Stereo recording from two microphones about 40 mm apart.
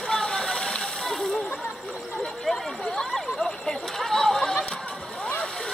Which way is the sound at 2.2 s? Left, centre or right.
Centre.